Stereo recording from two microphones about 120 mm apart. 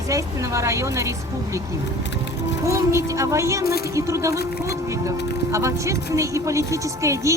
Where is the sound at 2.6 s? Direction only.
25° right (ahead or behind).